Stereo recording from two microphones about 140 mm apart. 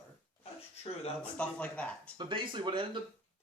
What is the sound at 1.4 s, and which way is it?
Speech, 10° left (ahead or behind).